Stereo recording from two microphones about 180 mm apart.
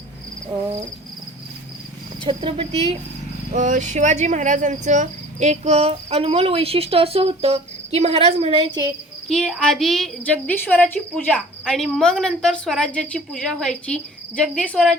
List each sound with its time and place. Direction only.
2.2 s speech: 30° right (ahead or behind)
3.5 s speech: 45° right (ahead or behind); by 8.8 s 30° right (ahead or behind)
9.3 s speech: centre (ahead or behind)